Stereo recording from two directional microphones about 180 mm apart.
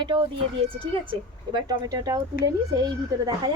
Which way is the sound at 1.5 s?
20° right (ahead or behind).